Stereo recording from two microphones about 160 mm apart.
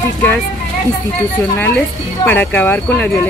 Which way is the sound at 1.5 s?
10° left (ahead or behind).